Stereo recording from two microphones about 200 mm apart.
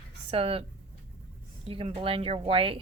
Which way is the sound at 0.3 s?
30° right (ahead or behind).